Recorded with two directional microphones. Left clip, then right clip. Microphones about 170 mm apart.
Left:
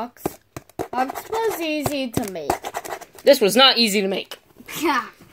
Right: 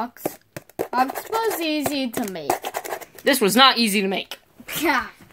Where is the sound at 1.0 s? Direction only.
Centre (ahead or behind).